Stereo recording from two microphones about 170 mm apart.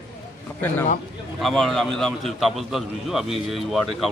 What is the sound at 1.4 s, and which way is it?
A man's voice, centre (ahead or behind).